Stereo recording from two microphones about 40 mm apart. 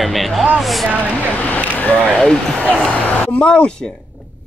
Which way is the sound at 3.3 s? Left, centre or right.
Left.